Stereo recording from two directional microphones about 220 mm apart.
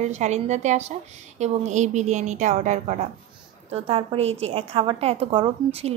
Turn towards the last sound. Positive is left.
turn(degrees=-25)  # may be behind; listen again after turning